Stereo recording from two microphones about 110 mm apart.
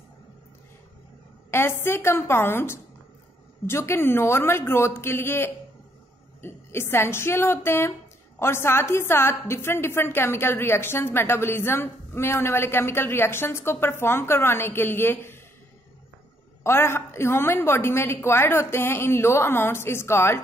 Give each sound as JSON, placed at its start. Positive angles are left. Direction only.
{"t": 1.5, "sound": "a woman's voice", "side_deg": 20}
{"t": 16.6, "sound": "a woman's voice", "side_deg": 20}